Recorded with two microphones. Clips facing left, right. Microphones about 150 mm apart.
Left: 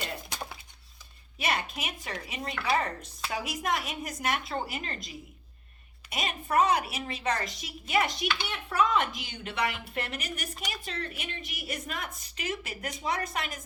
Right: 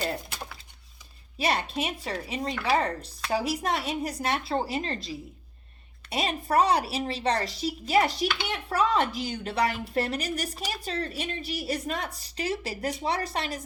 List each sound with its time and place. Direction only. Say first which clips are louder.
1.4 s speech: right 4 dB; 30° right (ahead or behind)